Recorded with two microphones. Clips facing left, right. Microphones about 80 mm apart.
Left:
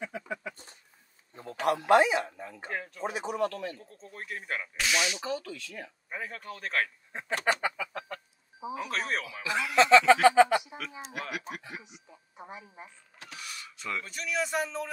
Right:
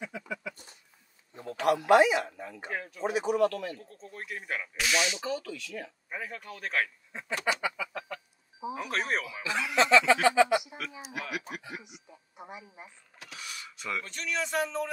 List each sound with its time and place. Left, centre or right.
0.0 s a sound: left
1.3 s a man's voice: left
2.7 s speech: centre
3.2 s speech: left
3.7 s speech: centre
5.2 s speech: left
6.0 s speech: centre
7.1 s duck: left
8.5 s a sound: centre
9.2 s speech: right
9.8 s a sound: left
11.1 s speech: left
13.7 s speech: centre
14.0 s speech: centre